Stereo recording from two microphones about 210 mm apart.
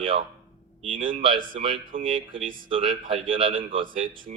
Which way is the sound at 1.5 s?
30° right (ahead or behind).